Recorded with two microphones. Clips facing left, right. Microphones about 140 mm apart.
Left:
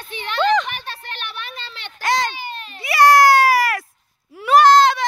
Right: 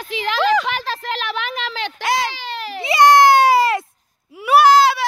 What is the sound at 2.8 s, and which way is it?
Baby cry, 20° right (ahead or behind).